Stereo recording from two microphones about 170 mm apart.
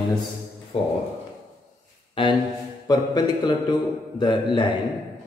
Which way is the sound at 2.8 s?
25° left (ahead or behind).